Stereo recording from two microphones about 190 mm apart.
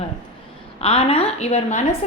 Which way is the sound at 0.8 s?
30° left (ahead or behind).